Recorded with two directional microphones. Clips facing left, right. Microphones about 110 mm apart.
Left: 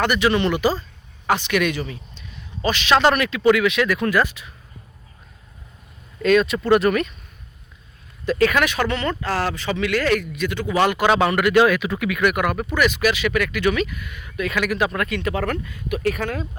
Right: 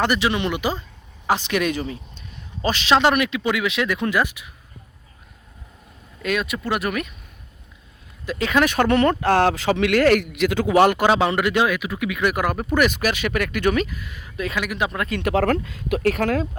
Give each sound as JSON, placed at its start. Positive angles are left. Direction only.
{"t": 0.0, "sound": "speech", "side_deg": -25}
{"t": 1.3, "sound": "speech", "side_deg": -30}
{"t": 3.0, "sound": "speech", "side_deg": -15}
{"t": 6.2, "sound": "speech", "side_deg": -10}
{"t": 8.2, "sound": "speech", "side_deg": -15}
{"t": 8.6, "sound": "speech", "side_deg": -50}
{"t": 10.3, "sound": "speech", "side_deg": -90}
{"t": 10.8, "sound": "speech", "side_deg": -50}
{"t": 11.1, "sound": "speech", "side_deg": -25}
{"t": 11.6, "sound": "speech", "side_deg": -10}
{"t": 14.6, "sound": "speech", "side_deg": -20}
{"t": 15.2, "sound": "speech", "side_deg": -75}